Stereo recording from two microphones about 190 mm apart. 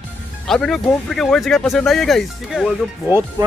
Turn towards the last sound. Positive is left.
turn(degrees=-10)  # may be behind; listen again after turning